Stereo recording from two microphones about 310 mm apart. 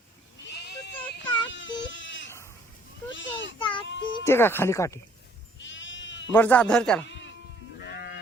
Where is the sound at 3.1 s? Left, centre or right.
Left.